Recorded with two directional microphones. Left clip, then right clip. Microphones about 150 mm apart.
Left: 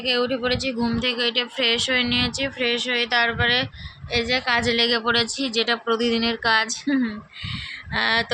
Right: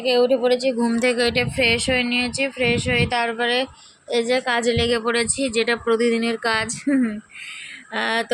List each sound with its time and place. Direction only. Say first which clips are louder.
0.0 s speech: right 5 dB; 5° right (ahead or behind)
0.9 s speech: right 1 dB; 45° right (ahead or behind)
1.5 s speech: right 1 dB; 15° right (ahead or behind)
4.6 s speech: even; centre (ahead or behind)